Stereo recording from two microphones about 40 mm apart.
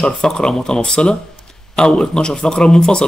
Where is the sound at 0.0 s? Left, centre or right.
Centre.